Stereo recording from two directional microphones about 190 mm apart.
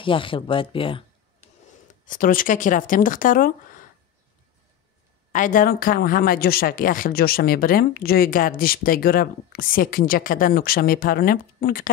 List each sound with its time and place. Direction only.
0.0 s speech: 25° left (ahead or behind)
1.9 s speech: 45° left (ahead or behind)
5.3 s speech: 45° left (ahead or behind)